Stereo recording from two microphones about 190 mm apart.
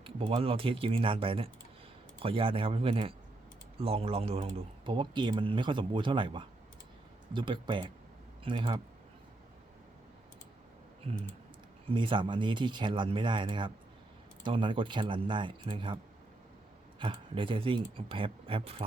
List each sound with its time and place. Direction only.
0.0 s a man's voice: 30° right (ahead or behind)
11.1 s a man's voice: 30° right (ahead or behind)
17.0 s a man's voice: 25° right (ahead or behind)